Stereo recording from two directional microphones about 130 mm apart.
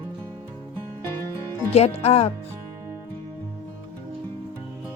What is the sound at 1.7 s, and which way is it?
Speech, 55° left (ahead or behind).